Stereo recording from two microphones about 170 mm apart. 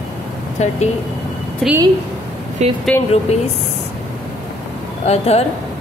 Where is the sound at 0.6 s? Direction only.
40° left (ahead or behind).